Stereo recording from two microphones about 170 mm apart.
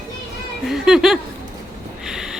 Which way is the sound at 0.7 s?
Centre (ahead or behind).